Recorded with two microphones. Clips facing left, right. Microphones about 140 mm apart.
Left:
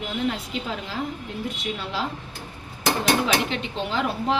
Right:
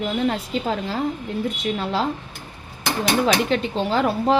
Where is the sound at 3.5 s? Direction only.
40° right (ahead or behind).